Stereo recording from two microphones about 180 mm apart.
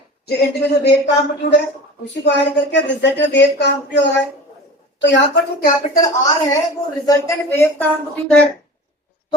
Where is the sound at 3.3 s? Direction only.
75° left (ahead or behind).